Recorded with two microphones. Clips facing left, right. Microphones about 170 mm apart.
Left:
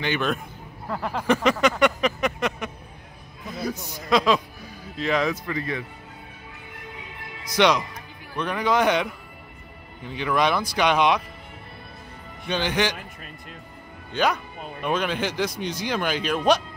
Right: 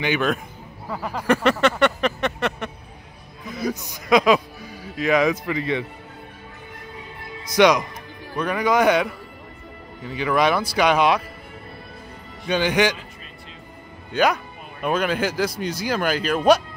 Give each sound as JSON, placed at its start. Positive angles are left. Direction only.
{"t": 0.0, "sound": "a man's voice", "side_deg": -10}
{"t": 2.0, "sound": "a sound", "side_deg": 0}
{"t": 3.8, "sound": "speech", "side_deg": -15}
{"t": 5.5, "sound": "speech", "side_deg": -20}
{"t": 7.5, "sound": "speech", "side_deg": -10}
{"t": 10.1, "sound": "speech", "side_deg": -5}
{"t": 12.4, "sound": "speech", "side_deg": -10}
{"t": 14.1, "sound": "a man's voice", "side_deg": -10}